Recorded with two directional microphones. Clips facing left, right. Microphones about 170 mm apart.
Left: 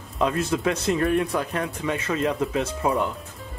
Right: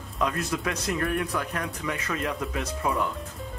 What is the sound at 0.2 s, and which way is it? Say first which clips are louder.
Speech: left 5 dB; 25° left (ahead or behind).